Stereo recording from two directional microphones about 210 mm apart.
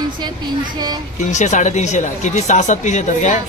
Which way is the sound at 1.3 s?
35° left (ahead or behind).